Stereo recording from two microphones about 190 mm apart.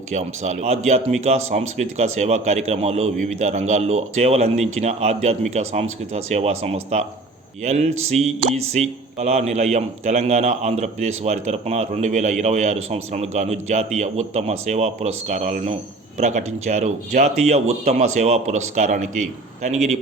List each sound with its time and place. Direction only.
0.1 s a man's voice: 40° right (ahead or behind)